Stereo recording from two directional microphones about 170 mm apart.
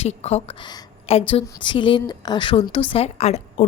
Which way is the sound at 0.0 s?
40° left (ahead or behind).